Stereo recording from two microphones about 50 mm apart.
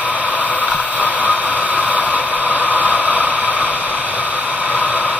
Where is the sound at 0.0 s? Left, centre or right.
Right.